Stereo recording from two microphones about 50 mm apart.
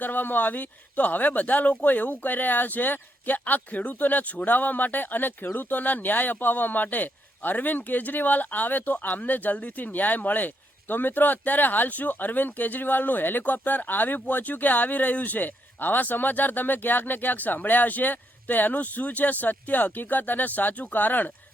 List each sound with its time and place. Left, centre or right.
0.0 s speech: left